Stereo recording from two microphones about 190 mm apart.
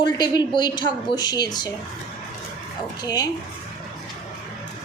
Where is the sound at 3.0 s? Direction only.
20° left (ahead or behind).